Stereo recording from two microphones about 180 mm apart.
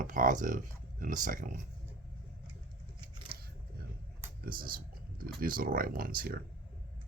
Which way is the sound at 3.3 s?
30° right (ahead or behind).